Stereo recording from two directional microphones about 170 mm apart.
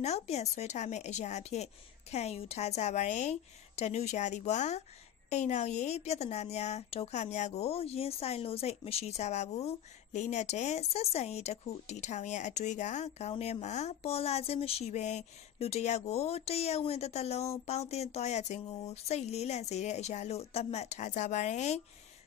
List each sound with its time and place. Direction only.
0.0 s speech: 40° left (ahead or behind)